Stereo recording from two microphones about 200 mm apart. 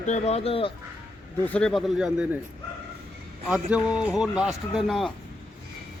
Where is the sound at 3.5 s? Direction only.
5° right (ahead or behind).